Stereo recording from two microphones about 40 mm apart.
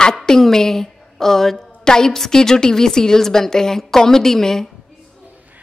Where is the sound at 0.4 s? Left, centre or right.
Centre.